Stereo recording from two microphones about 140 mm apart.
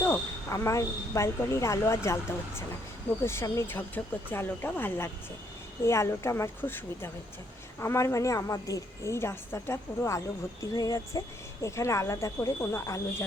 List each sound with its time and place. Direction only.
0.0 s a woman's voice: 15° left (ahead or behind)